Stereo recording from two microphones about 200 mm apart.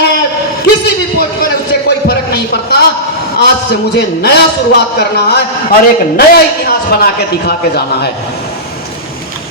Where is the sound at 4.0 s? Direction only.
55° left (ahead or behind).